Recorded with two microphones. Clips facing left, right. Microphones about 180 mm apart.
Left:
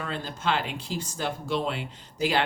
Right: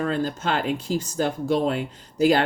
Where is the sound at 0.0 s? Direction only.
45° right (ahead or behind).